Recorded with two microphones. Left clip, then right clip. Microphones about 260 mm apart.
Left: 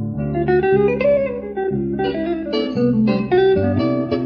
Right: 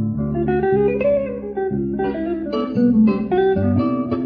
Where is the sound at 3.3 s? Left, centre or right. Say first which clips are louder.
Left 4 dB; left.